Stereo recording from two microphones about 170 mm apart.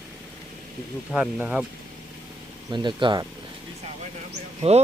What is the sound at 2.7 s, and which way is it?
Speech, 25° right (ahead or behind).